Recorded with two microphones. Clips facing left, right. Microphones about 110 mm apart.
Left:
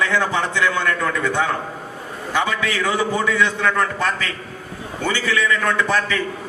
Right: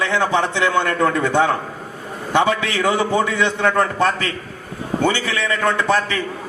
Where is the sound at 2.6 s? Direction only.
30° right (ahead or behind).